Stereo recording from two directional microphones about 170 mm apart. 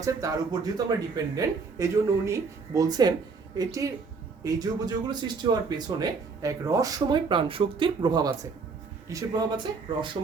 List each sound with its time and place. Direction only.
0.0 s speech: 20° right (ahead or behind)